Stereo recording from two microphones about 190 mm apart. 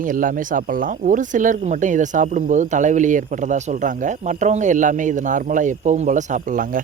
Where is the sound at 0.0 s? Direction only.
45° right (ahead or behind).